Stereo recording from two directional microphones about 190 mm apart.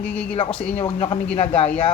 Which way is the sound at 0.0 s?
5° left (ahead or behind).